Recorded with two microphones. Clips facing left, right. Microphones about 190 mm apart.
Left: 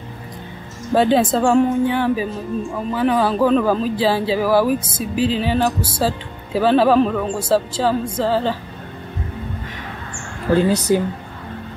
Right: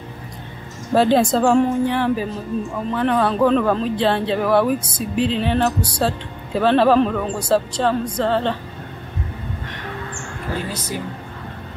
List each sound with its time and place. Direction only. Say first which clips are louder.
0.9 s speech: even; centre (ahead or behind)
10.7 s speech: left 12 dB; 70° left (ahead or behind)